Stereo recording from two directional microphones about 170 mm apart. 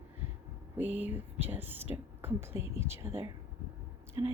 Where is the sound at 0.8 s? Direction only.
10° right (ahead or behind).